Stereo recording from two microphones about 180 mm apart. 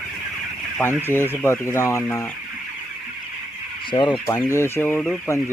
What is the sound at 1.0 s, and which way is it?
Speech, 10° left (ahead or behind).